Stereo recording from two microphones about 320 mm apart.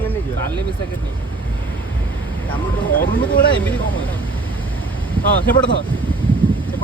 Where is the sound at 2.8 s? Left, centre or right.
Left.